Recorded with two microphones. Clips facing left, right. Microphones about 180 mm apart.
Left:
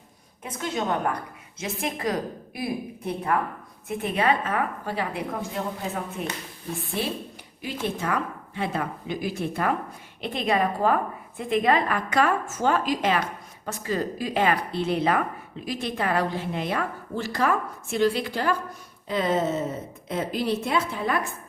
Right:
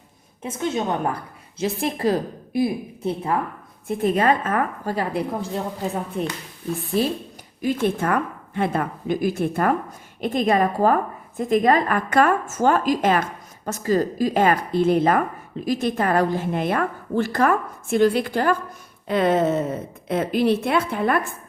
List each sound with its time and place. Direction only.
0.4 s a woman's voice: 25° right (ahead or behind)
3.8 s a woman's voice: 40° right (ahead or behind)
7.6 s a woman's voice: 50° right (ahead or behind)
19.0 s a woman's voice: 60° right (ahead or behind)